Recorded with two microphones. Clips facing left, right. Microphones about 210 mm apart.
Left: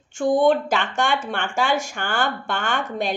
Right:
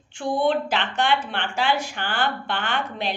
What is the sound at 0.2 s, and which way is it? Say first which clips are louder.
Speech: left 5 dB; 45° left (ahead or behind).